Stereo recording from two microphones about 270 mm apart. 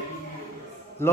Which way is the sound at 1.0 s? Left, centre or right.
Centre.